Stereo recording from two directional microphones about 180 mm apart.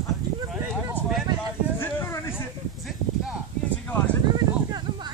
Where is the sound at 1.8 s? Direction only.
10° left (ahead or behind).